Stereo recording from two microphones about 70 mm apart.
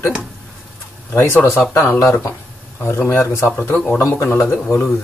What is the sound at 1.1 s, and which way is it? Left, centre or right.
Speech, left.